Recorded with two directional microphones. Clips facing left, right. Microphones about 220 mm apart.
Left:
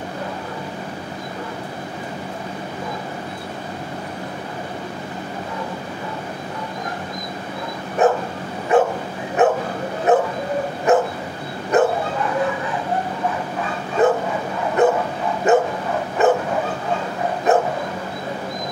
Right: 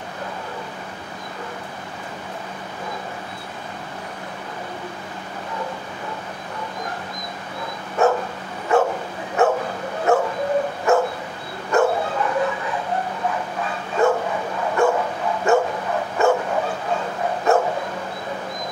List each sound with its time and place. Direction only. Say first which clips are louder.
8.0 s dog: left 2 dB; 15° left (ahead or behind)
8.7 s bow-wow: left 2 dB; 20° left (ahead or behind)
10.1 s dog: left 1 dB; 20° left (ahead or behind)
11.7 s bow-wow: left 2 dB; 20° left (ahead or behind)
14.0 s bow-wow: left 2 dB; 20° left (ahead or behind)
15.5 s dog: left 2 dB; 20° left (ahead or behind)
16.2 s bow-wow: left 2 dB; 20° left (ahead or behind)
17.5 s dog: left 1 dB; 20° left (ahead or behind)